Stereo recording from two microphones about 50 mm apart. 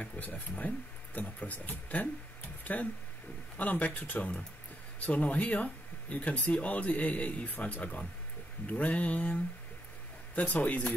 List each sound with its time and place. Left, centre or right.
0.0 s speech: left